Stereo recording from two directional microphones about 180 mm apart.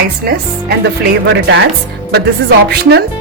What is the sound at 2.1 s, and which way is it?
Speech, 65° right (ahead or behind).